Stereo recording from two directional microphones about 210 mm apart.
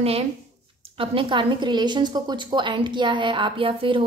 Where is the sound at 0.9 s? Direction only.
25° right (ahead or behind).